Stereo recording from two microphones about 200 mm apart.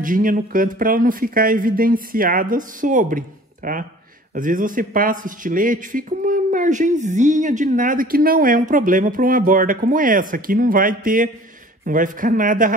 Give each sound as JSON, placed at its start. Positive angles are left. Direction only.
{"t": 0.0, "sound": "a man's voice", "side_deg": -45}